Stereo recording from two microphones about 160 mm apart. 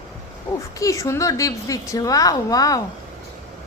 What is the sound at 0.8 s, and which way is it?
A woman's voice, 20° left (ahead or behind).